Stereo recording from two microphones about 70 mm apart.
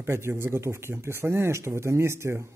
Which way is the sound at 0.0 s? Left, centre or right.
Right.